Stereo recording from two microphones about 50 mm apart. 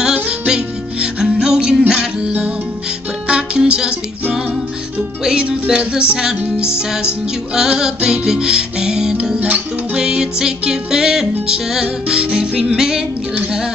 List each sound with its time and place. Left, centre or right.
0.0 s music: centre